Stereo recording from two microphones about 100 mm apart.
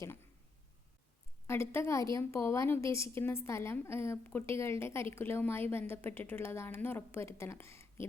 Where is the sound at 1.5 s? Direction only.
25° left (ahead or behind).